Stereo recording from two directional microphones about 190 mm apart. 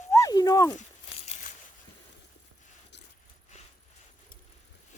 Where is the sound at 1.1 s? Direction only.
35° left (ahead or behind).